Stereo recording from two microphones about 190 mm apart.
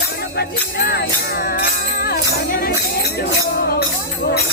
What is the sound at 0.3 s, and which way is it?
Music, 55° left (ahead or behind).